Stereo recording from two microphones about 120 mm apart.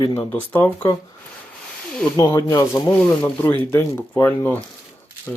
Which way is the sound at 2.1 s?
30° left (ahead or behind).